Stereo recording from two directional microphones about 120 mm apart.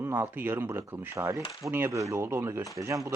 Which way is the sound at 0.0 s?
20° right (ahead or behind).